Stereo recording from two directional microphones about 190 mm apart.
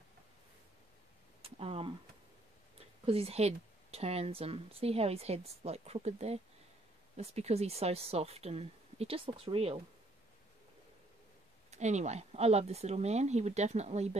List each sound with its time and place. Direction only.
1.4 s speech: 30° right (ahead or behind)
3.1 s speech: 30° right (ahead or behind)
11.7 s speech: 40° right (ahead or behind)